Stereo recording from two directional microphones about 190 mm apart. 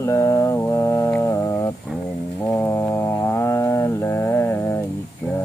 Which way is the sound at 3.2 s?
15° left (ahead or behind).